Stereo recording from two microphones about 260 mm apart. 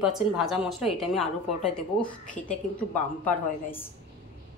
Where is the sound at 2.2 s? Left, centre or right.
Left.